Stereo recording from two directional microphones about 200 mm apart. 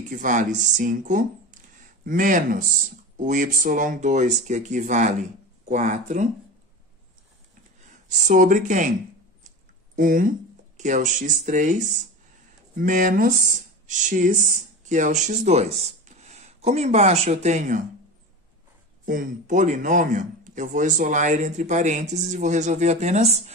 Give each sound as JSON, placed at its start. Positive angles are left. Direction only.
{"t": 0.1, "sound": "speech", "side_deg": -40}
{"t": 8.3, "sound": "speech", "side_deg": -40}
{"t": 9.9, "sound": "speech", "side_deg": -45}
{"t": 19.0, "sound": "speech", "side_deg": -40}